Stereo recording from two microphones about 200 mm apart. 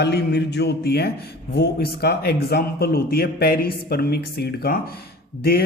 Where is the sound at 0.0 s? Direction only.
55° left (ahead or behind).